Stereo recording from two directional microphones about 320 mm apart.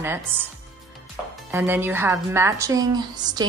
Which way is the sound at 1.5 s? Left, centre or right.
Centre.